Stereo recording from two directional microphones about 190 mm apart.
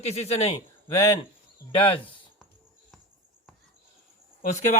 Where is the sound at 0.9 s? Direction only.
15° left (ahead or behind).